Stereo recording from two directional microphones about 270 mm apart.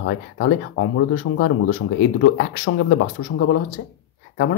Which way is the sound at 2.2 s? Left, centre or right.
Left.